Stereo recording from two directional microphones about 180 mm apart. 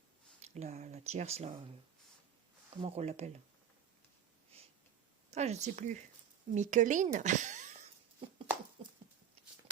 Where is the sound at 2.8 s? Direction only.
35° right (ahead or behind).